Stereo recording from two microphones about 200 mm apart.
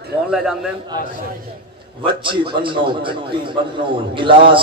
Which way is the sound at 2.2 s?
25° right (ahead or behind).